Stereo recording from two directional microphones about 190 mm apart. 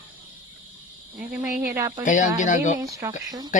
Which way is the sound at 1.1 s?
5° right (ahead or behind).